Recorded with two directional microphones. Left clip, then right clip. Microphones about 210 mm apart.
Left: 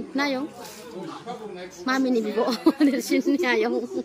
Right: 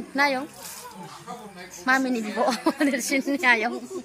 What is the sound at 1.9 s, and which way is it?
A woman's voice, 5° left (ahead or behind).